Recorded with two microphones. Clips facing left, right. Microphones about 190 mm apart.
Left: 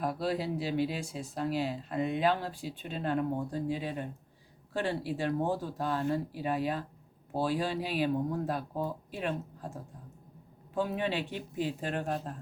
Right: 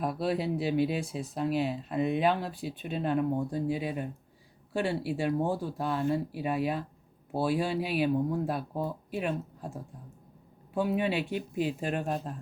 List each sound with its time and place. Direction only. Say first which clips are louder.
0.0 s speech: right 2 dB; 15° right (ahead or behind)
10.8 s speech: right 3 dB; 10° right (ahead or behind)